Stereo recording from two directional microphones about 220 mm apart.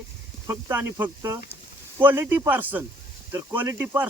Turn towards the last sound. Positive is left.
turn(degrees=-10)  # may be behind; listen again after turning